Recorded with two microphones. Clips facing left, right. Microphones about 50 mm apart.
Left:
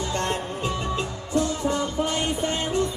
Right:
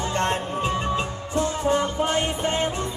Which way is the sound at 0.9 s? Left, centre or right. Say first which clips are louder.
Even; right.